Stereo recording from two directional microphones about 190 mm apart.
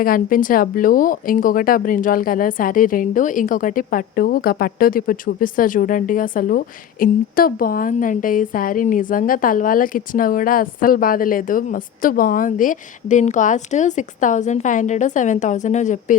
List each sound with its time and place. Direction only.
0.0 s a woman's voice: 45° left (ahead or behind)